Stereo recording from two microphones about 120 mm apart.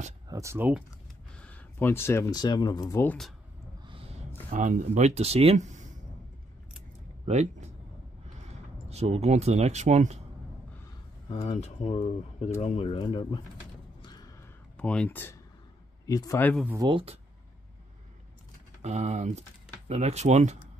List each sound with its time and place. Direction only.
0.3 s speech: 25° right (ahead or behind)
1.3 s a sound: 10° left (ahead or behind)
2.3 s speech: 35° left (ahead or behind)
3.8 s a sound: 45° right (ahead or behind)
4.5 s speech: 90° right
7.2 s speech: 70° right (ahead or behind)
8.8 s speech: 60° right (ahead or behind)
11.2 s speech: 60° left (ahead or behind)
13.0 s speech: 40° left (ahead or behind)
14.0 s a sound: 35° left (ahead or behind)
14.8 s speech: 10° left (ahead or behind)
16.1 s speech: 30° left (ahead or behind)
16.9 s speech: 55° right (ahead or behind)
18.8 s speech: 65° right (ahead or behind)